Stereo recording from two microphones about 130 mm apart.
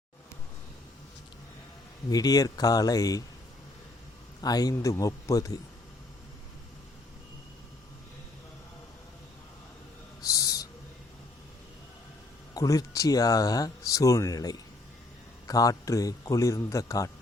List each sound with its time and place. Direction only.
2.0 s speech: 30° left (ahead or behind)
4.4 s speech: 30° left (ahead or behind)
10.2 s owl: 25° left (ahead or behind)
12.5 s speech: 25° left (ahead or behind)